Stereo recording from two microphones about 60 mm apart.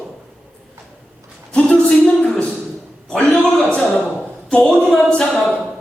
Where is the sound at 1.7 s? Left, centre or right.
Centre.